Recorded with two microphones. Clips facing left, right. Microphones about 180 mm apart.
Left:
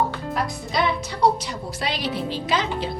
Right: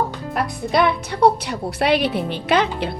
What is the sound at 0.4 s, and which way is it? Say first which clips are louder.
A woman's voice: right 7 dB; 60° right (ahead or behind).